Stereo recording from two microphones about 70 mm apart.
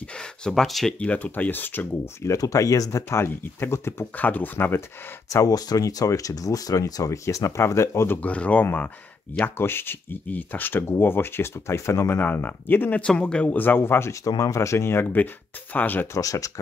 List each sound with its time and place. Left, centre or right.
0.2 s speech: centre
0.9 s speech: left
2.2 s speech: left
3.1 s speech: left
4.2 s speech: left
5.3 s speech: left
8.2 s speech: centre
9.6 s speech: left
12.2 s speech: left
13.0 s speech: centre; by 14.1 s left
14.4 s speech: left
16.1 s speech: left